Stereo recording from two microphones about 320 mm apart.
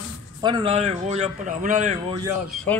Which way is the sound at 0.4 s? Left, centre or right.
Centre.